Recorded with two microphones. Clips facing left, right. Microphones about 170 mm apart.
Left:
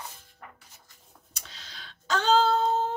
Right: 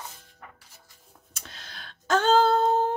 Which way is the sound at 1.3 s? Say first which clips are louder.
Right 3 dB; 55° right (ahead or behind).